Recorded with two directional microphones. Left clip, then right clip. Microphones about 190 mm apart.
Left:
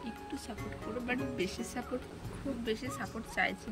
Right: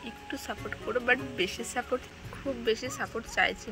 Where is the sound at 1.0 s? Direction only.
10° left (ahead or behind).